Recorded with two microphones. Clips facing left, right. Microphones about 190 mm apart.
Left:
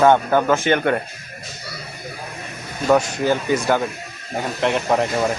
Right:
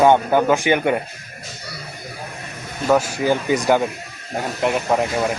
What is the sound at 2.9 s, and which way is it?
Speech, 5° right (ahead or behind).